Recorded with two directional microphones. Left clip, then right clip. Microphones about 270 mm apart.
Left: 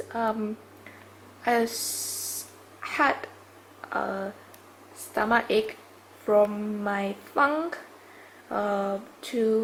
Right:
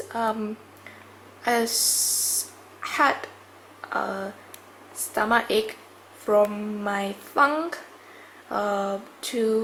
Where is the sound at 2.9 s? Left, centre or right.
Centre.